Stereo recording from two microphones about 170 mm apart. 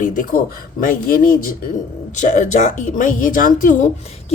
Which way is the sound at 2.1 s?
45° left (ahead or behind).